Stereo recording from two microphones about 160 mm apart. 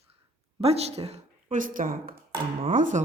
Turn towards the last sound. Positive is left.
turn(degrees=-55)  # may be behind; listen again after turning